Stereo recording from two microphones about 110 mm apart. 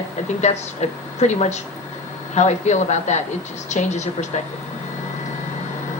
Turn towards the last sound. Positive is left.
turn(degrees=90)